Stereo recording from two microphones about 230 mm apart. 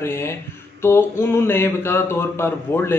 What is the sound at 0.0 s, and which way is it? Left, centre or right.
A man's voice, centre.